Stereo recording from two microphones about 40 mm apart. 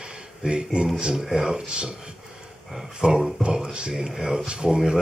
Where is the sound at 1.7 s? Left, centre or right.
Right.